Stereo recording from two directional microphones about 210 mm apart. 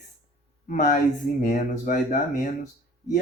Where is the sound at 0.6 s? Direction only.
40° left (ahead or behind).